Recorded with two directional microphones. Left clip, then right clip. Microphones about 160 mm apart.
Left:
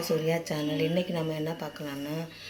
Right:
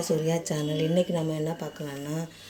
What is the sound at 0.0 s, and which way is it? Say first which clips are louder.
A woman's voice: right 1 dB; 35° right (ahead or behind).